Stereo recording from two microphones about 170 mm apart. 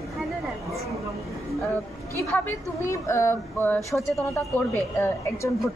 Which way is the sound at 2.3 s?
15° left (ahead or behind).